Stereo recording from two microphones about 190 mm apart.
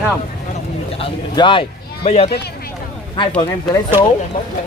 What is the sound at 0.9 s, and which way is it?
Bird, 25° left (ahead or behind).